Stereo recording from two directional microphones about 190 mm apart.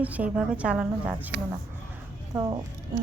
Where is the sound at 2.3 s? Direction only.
20° right (ahead or behind).